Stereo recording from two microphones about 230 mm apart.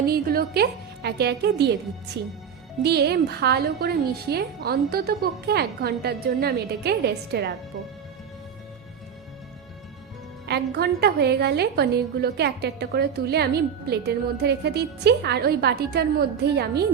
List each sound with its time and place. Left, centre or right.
0.1 s a woman's voice: right
10.4 s a woman's voice: right